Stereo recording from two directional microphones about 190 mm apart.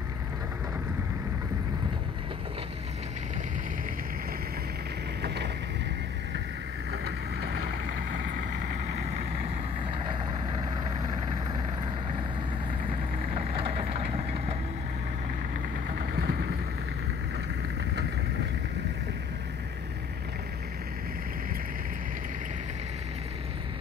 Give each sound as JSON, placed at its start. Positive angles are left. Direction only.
{"t": 5.2, "sound": "boat", "side_deg": -60}
{"t": 6.9, "sound": "vehicle", "side_deg": -60}
{"t": 9.8, "sound": "vehicle", "side_deg": -25}
{"t": 12.9, "sound": "vehicle", "side_deg": -30}
{"t": 15.9, "sound": "vehicle", "side_deg": -50}